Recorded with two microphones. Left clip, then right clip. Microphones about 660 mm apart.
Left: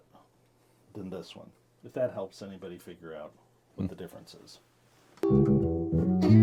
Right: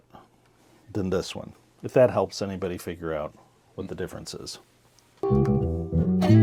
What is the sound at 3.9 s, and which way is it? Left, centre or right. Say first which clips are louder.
Speech: right 10 dB; right.